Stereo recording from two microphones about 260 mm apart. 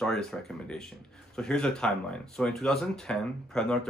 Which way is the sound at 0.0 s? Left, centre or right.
Centre.